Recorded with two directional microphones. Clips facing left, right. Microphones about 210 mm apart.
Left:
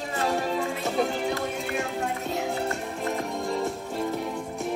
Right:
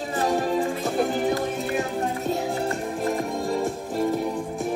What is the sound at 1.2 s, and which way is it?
Music, 45° right (ahead or behind).